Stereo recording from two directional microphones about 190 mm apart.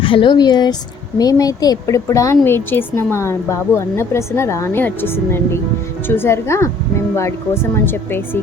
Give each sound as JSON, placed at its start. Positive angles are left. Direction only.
{"t": 0.0, "sound": "speech", "side_deg": 25}